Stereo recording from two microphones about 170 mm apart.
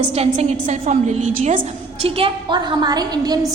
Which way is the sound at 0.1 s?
40° right (ahead or behind).